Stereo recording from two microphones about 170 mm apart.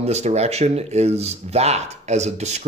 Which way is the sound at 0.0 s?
40° right (ahead or behind).